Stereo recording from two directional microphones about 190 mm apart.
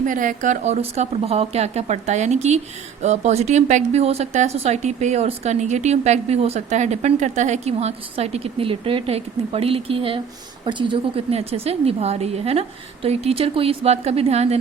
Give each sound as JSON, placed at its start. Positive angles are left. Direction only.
{"t": 0.0, "sound": "a woman's voice", "side_deg": -45}